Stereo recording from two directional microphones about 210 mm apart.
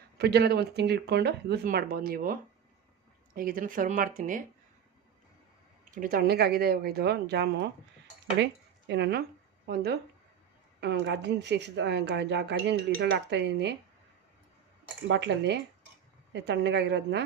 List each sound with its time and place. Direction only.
0.2 s speech: 50° right (ahead or behind)
5.9 s speech: 40° right (ahead or behind)
15.0 s speech: 55° right (ahead or behind)